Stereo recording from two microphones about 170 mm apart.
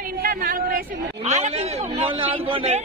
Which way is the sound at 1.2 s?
40° right (ahead or behind).